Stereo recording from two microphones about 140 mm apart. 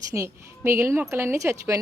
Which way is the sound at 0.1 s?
20° right (ahead or behind).